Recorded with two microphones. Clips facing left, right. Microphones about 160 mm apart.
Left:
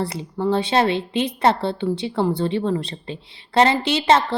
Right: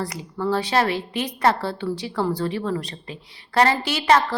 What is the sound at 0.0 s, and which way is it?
A woman's voice, 25° left (ahead or behind).